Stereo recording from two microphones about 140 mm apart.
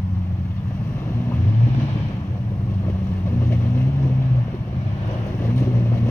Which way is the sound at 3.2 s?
15° left (ahead or behind).